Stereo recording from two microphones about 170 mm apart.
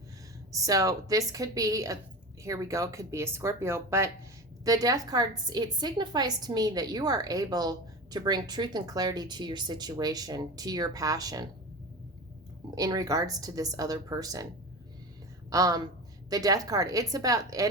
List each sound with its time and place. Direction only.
0.5 s a woman's voice: 20° right (ahead or behind)
12.7 s a woman's voice: 20° right (ahead or behind)
15.4 s a woman's voice: 20° right (ahead or behind)